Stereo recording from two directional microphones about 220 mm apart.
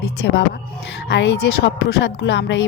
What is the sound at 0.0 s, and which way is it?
A woman's voice, 50° left (ahead or behind).